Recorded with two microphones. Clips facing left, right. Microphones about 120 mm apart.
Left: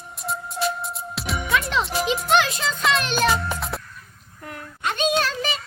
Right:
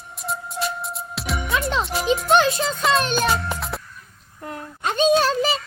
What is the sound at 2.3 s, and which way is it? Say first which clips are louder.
Music: right 3 dB; 30° right (ahead or behind).